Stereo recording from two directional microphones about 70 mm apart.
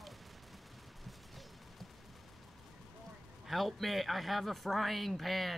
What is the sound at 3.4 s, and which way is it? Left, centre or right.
Speech, centre.